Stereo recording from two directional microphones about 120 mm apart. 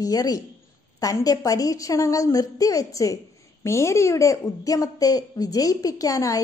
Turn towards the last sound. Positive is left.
turn(degrees=30)  # may be behind; listen again after turning